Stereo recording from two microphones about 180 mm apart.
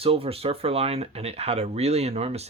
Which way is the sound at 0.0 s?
30° right (ahead or behind).